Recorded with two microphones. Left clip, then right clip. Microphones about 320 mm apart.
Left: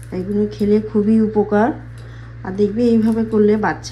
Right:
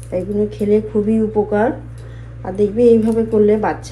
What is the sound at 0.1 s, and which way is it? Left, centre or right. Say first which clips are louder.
A woman's voice: right 2 dB; centre.